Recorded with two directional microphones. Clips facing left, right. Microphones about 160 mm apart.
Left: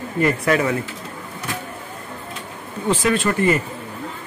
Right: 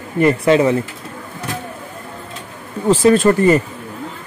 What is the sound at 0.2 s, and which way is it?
Speech, 25° right (ahead or behind).